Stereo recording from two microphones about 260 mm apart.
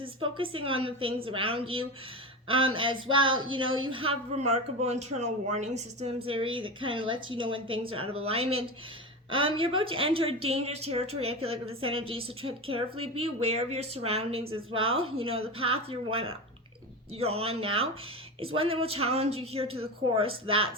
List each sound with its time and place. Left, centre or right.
0.0 s speech: centre